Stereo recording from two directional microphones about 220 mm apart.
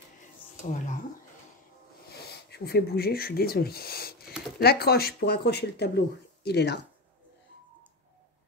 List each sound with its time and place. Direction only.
0.7 s speech: 35° left (ahead or behind)
2.0 s speech: 45° left (ahead or behind)